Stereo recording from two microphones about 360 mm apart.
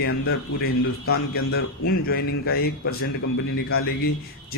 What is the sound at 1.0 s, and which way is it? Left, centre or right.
A man's voice, left.